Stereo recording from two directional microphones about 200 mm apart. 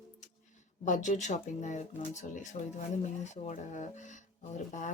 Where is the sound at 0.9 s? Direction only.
35° left (ahead or behind).